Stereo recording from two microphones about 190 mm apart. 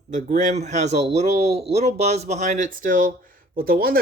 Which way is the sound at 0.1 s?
40° right (ahead or behind).